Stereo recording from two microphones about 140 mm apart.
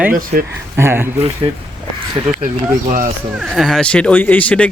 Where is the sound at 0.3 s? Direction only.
70° right (ahead or behind).